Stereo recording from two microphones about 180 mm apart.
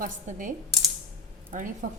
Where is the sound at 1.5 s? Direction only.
45° right (ahead or behind).